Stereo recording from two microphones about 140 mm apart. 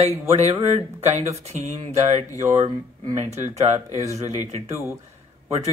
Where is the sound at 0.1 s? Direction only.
20° right (ahead or behind).